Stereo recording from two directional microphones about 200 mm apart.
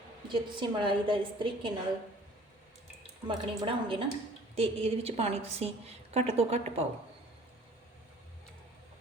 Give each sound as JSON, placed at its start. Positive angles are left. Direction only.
{"t": 0.3, "sound": "a woman's voice", "side_deg": -25}
{"t": 3.2, "sound": "a woman's voice", "side_deg": -25}